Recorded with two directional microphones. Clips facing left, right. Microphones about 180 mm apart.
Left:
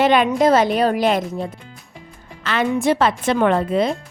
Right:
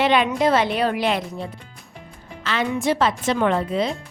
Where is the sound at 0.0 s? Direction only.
45° left (ahead or behind).